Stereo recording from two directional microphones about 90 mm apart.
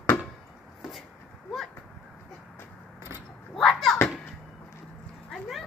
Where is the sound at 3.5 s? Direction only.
Centre (ahead or behind).